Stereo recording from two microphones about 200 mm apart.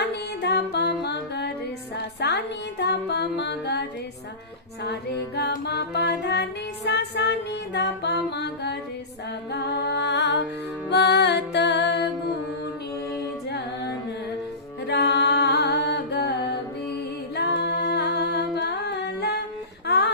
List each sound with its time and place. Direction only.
0.0 s music: 55° left (ahead or behind)
5.4 s music: 55° left (ahead or behind)
14.8 s singing: 55° left (ahead or behind)
17.3 s humming: 55° left (ahead or behind)